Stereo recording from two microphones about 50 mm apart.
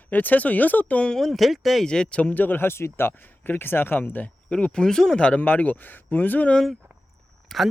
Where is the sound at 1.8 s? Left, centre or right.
Centre; by 4.3 s left.